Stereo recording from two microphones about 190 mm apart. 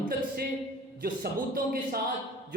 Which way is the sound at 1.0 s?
50° right (ahead or behind).